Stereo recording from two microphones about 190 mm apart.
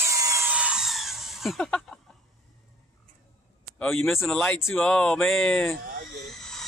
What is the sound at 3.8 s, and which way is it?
Speech, centre (ahead or behind).